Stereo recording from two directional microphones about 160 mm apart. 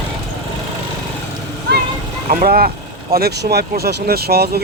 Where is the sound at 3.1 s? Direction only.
75° right (ahead or behind).